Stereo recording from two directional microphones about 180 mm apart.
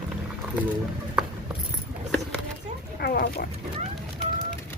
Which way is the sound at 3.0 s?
60° left (ahead or behind).